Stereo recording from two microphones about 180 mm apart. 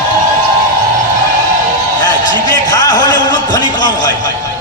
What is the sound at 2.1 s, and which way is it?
A man's voice, 20° left (ahead or behind).